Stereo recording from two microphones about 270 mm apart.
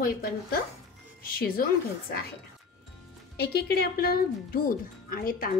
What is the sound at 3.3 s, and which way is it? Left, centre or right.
A woman's voice, left.